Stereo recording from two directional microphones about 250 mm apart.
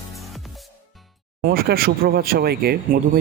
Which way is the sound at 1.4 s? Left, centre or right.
Right.